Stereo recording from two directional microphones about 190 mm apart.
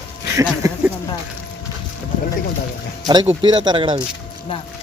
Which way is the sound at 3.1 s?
25° right (ahead or behind).